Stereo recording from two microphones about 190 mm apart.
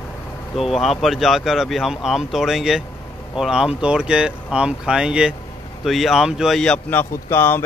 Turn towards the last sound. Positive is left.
turn(degrees=10)  # may be behind; listen again after turning